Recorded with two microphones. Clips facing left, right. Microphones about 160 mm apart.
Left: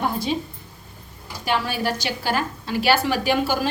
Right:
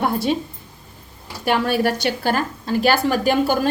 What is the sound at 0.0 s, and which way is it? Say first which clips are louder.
Speech: right 4 dB; 60° right (ahead or behind).